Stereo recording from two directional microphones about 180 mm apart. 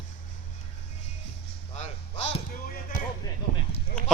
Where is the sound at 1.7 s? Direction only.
40° left (ahead or behind).